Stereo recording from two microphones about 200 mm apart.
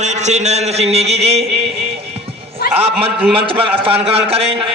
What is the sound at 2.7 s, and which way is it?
A man's voice, 30° right (ahead or behind).